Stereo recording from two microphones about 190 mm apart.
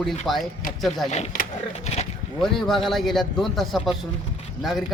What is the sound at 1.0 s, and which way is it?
Speech, 35° left (ahead or behind).